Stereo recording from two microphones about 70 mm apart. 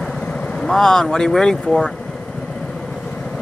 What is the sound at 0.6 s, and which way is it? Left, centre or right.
Speech, centre.